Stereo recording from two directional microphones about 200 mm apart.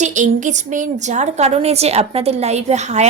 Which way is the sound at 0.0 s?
35° right (ahead or behind).